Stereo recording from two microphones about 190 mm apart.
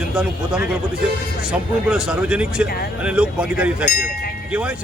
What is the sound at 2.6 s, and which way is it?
Speech, 55° left (ahead or behind).